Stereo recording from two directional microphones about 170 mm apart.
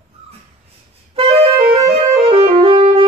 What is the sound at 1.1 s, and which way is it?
Clarinet, 35° right (ahead or behind).